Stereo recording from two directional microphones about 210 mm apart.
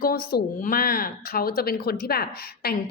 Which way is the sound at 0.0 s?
45° left (ahead or behind).